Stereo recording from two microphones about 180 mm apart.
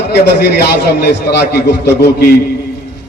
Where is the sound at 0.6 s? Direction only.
65° left (ahead or behind).